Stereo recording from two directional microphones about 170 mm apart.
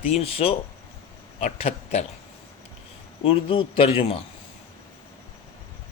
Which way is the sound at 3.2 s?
30° left (ahead or behind).